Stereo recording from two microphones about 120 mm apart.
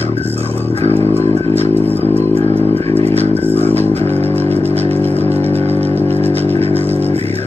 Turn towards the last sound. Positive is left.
turn(degrees=15)  # may be behind; listen again after turning